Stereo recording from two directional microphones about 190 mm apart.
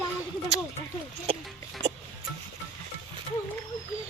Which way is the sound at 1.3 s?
30° right (ahead or behind).